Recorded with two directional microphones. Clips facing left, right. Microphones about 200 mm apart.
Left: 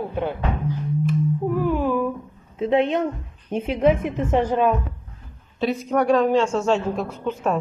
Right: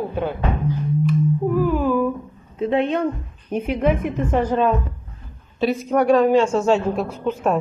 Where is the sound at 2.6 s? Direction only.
20° left (ahead or behind).